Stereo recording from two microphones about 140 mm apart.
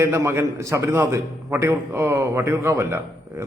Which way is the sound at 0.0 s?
20° right (ahead or behind).